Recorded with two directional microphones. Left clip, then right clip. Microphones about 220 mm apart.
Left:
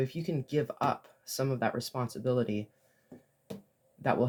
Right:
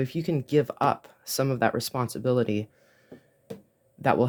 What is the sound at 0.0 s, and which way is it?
Speech, 45° right (ahead or behind).